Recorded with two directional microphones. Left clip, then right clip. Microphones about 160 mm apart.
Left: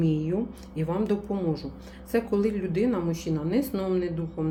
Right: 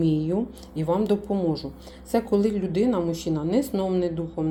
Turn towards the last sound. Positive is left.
turn(degrees=-20)  # may be behind; listen again after turning